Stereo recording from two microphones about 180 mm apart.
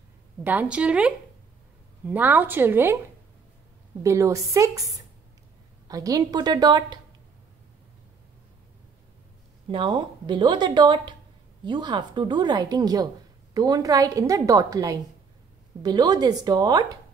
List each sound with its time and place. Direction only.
0.4 s a woman's voice: 10° right (ahead or behind)
4.0 s a woman's voice: 15° right (ahead or behind)
9.7 s a woman's voice: 25° right (ahead or behind)